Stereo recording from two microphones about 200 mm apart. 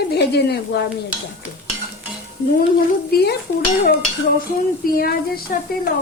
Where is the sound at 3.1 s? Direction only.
55° left (ahead or behind).